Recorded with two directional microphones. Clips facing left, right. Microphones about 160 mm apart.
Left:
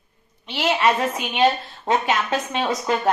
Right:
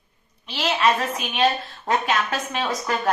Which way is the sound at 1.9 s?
25° left (ahead or behind).